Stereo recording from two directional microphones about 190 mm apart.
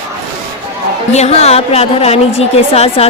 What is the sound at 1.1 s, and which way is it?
A woman's voice, 35° left (ahead or behind).